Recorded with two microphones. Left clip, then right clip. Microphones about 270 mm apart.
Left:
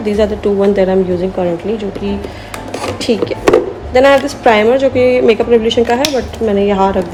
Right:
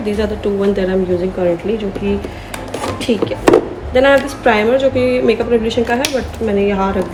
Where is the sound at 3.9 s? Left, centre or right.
Centre.